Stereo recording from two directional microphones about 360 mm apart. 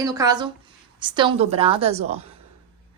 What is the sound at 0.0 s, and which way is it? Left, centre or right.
A woman's voice, centre.